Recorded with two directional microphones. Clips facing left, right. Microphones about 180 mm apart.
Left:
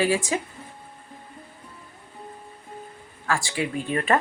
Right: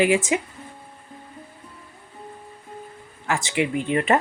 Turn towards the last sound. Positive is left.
turn(degrees=-20)  # may be behind; listen again after turning